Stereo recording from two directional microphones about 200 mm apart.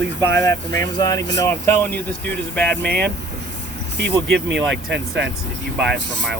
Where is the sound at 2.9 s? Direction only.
55° right (ahead or behind).